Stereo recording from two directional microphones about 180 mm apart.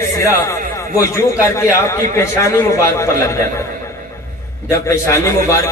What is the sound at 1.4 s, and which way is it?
A man's voice, 15° left (ahead or behind).